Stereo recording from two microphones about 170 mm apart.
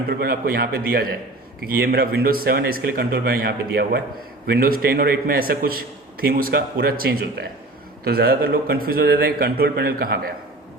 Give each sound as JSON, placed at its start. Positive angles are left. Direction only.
{"t": 0.2, "sound": "a man's voice", "side_deg": -65}